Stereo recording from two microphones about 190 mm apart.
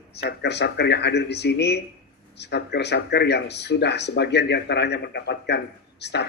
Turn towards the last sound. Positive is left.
turn(degrees=65)  # may be behind; listen again after turning